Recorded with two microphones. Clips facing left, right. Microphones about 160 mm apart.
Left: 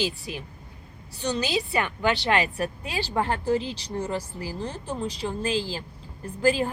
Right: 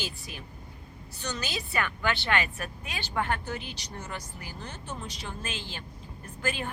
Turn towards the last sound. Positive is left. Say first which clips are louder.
# left 10 dB
turn(degrees=30)  # may be behind; listen again after turning